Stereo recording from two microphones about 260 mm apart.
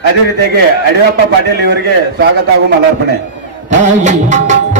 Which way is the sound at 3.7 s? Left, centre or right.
Right.